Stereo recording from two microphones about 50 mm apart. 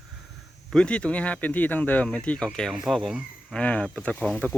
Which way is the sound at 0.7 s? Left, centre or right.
Centre.